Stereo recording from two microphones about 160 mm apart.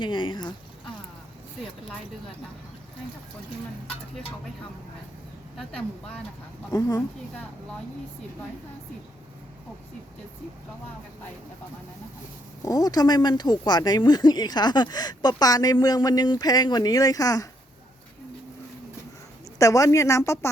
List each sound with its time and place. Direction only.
0.0 s speech: 30° left (ahead or behind)
6.7 s speech: 25° left (ahead or behind)
12.6 s speech: 20° left (ahead or behind)
19.5 s speech: 20° left (ahead or behind)